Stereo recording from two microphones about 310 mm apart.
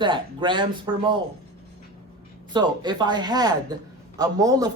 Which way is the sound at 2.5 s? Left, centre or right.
Centre.